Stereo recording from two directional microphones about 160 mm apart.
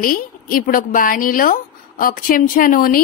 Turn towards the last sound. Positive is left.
turn(degrees=60)  # may be behind; listen again after turning